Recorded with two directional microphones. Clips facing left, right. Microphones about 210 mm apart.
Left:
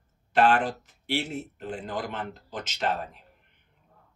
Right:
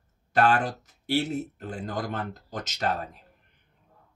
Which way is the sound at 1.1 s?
40° right (ahead or behind).